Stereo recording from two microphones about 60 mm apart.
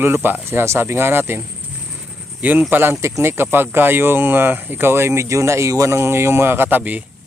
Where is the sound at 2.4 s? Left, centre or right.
Right.